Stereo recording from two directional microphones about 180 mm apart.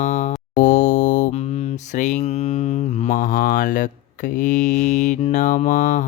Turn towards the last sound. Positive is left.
turn(degrees=45)  # may be behind; listen again after turning